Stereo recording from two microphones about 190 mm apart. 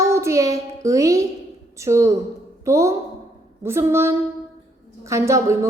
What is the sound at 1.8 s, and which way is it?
A woman's voice, 15° right (ahead or behind).